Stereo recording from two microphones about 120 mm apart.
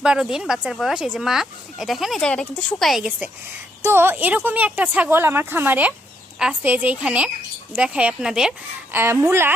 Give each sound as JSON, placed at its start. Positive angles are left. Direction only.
{"t": 0.0, "sound": "speech", "side_deg": -5}
{"t": 3.8, "sound": "a woman's voice", "side_deg": -20}
{"t": 8.9, "sound": "a woman's voice", "side_deg": -20}